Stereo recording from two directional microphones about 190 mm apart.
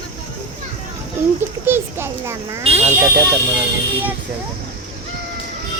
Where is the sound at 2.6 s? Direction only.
30° right (ahead or behind).